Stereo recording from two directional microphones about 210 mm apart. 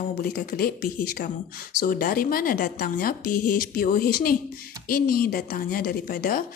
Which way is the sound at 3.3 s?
90° left.